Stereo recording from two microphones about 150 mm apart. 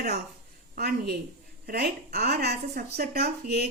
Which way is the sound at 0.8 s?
90° right.